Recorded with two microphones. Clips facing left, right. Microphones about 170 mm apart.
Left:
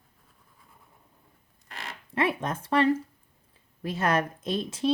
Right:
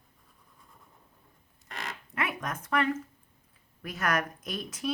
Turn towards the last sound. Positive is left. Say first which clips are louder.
# left 7 dB
turn(degrees=30)  # may be behind; listen again after turning